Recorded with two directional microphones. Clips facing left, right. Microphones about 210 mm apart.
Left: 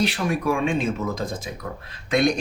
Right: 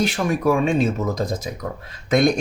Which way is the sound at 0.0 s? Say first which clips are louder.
Right 3 dB; 45° right (ahead or behind).